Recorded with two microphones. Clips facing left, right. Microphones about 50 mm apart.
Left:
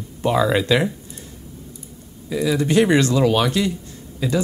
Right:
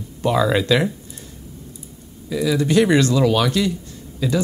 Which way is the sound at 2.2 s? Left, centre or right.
Left.